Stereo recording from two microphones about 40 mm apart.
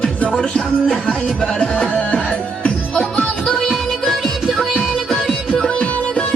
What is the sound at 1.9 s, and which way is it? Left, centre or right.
Music, left.